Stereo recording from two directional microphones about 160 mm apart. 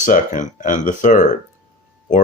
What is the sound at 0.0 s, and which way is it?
Speech, 55° left (ahead or behind).